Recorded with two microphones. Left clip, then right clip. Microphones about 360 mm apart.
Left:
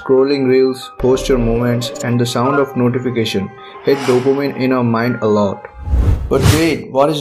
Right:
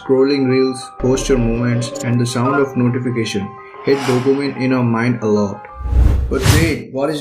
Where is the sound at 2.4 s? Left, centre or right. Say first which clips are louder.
Even; centre.